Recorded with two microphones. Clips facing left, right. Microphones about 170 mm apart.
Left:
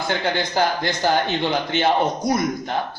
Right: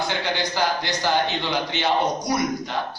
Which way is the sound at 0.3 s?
50° left (ahead or behind).